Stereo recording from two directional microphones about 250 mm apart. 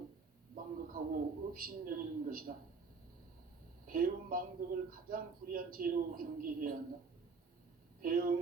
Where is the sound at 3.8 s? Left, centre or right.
Right.